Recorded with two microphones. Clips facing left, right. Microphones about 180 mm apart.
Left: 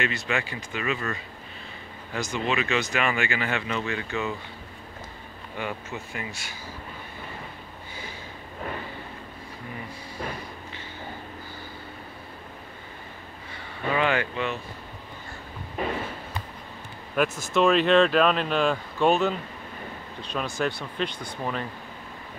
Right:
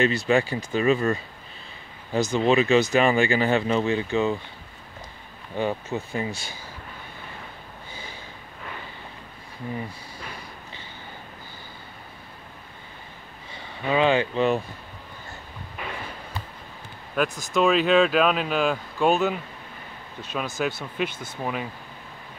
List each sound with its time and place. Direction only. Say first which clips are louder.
0.0 s speech: right 8 dB; 35° right (ahead or behind)
5.6 s speech: right 7 dB; 30° right (ahead or behind)
13.9 s speech: right 5 dB; 25° right (ahead or behind)
15.8 s a sound: left 7 dB; 40° left (ahead or behind)
17.1 s speech: even; centre (ahead or behind)